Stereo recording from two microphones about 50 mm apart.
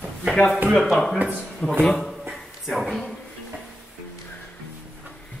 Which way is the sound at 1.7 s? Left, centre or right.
Centre.